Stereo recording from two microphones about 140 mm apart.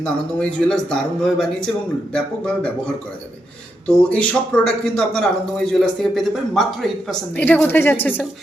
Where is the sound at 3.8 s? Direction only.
10° left (ahead or behind).